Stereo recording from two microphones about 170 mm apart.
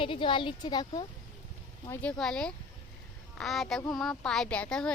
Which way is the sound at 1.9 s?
5° left (ahead or behind).